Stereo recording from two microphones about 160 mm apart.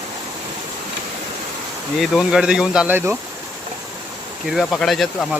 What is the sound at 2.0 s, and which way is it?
Speech, centre (ahead or behind).